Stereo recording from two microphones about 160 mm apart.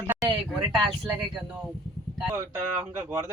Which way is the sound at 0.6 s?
30° right (ahead or behind).